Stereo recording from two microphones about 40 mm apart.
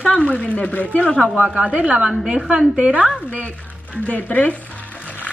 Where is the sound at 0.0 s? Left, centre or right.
Left.